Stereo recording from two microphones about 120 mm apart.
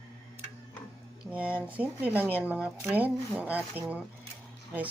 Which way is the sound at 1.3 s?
10° right (ahead or behind).